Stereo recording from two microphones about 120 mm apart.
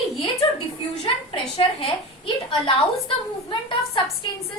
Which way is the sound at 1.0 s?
50° left (ahead or behind).